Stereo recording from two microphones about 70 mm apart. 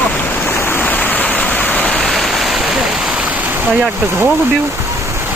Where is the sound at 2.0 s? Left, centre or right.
Centre.